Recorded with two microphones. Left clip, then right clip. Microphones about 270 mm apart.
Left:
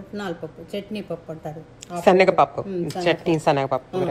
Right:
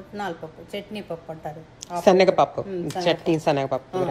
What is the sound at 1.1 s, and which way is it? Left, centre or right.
Speech, centre.